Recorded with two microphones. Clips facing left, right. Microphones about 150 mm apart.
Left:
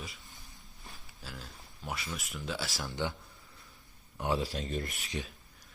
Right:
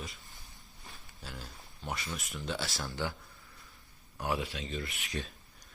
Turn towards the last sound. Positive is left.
turn(degrees=45)  # may be behind; listen again after turning